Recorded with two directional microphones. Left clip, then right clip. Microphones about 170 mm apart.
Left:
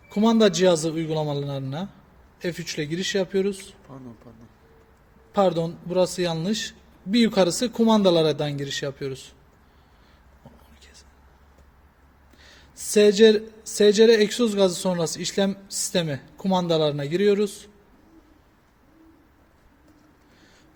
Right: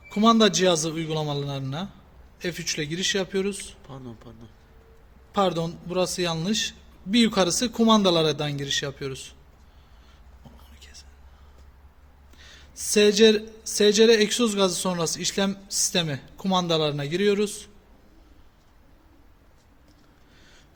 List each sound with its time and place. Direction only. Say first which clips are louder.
0.1 s speech: even; 20° left (ahead or behind)
5.3 s speech: left 3 dB; 15° left (ahead or behind)
10.8 s whispering: right 3 dB; 15° left (ahead or behind)
12.4 s speech: right 3 dB; 15° left (ahead or behind)